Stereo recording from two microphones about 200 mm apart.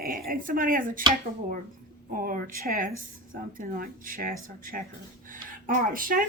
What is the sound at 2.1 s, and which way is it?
A woman's voice, 45° right (ahead or behind).